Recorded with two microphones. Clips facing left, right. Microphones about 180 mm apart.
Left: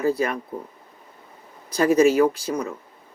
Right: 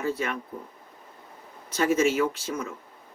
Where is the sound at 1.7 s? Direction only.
35° left (ahead or behind).